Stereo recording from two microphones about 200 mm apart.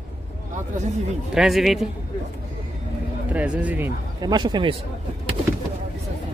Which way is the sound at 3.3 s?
5° right (ahead or behind).